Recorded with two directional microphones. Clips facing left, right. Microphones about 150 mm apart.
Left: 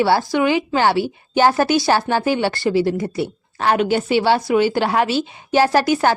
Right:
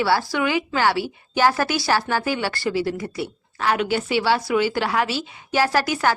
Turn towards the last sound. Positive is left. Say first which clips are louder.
# left 5 dB
turn(degrees=25)  # may be behind; listen again after turning